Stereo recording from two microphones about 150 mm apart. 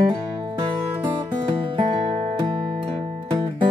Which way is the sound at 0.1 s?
35° right (ahead or behind).